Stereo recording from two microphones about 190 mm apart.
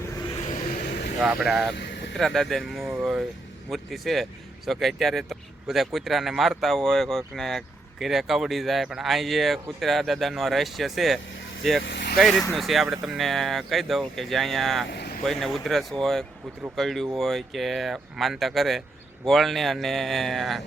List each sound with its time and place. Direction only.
1.2 s speech: 5° right (ahead or behind)
2.9 s vehicle: 5° right (ahead or behind)
3.7 s speech: centre (ahead or behind)
11.8 s speech: 70° left (ahead or behind)
12.1 s speech: centre (ahead or behind)
14.8 s vehicle: 55° left (ahead or behind)
15.2 s speech: centre (ahead or behind)